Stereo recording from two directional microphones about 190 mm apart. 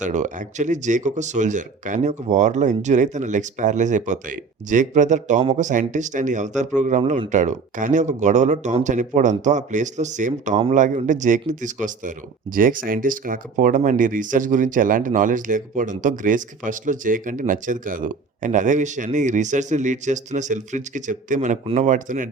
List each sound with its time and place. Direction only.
0.0 s speech: 40° right (ahead or behind)
7.0 s speech: 25° right (ahead or behind)
7.3 s speech: 40° right (ahead or behind)